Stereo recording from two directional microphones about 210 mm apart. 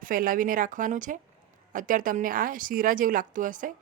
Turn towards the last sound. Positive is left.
turn(degrees=-40)  # may be behind; listen again after turning